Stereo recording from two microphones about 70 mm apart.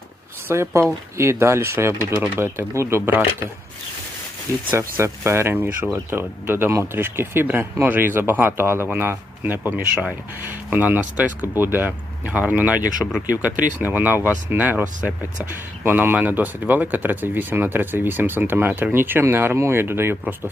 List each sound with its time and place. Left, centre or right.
0.4 s speech: right
4.8 s speech: right
5.6 s speech: right
6.1 s speech: right